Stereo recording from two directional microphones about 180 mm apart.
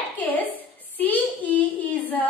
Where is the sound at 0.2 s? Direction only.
10° left (ahead or behind).